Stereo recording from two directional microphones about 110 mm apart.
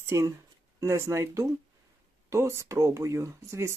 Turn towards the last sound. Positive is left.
turn(degrees=-25)  # may be behind; listen again after turning